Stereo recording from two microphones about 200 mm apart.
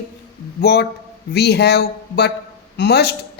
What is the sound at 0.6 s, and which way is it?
A man's voice, 55° left (ahead or behind).